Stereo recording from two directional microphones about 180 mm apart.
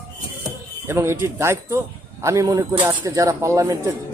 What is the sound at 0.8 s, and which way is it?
Speech, 15° right (ahead or behind).